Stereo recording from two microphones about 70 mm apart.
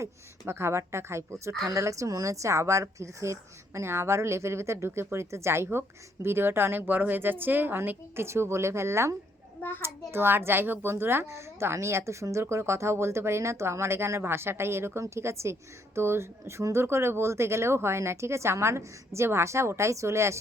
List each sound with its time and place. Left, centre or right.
0.0 s a child's voice: right